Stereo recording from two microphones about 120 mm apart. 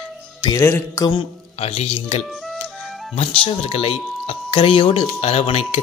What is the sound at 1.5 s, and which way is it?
Speech, 55° left (ahead or behind).